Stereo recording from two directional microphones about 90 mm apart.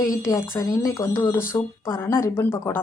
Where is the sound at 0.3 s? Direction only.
35° left (ahead or behind).